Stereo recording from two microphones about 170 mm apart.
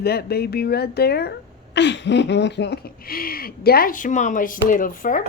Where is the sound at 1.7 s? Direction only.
90° left.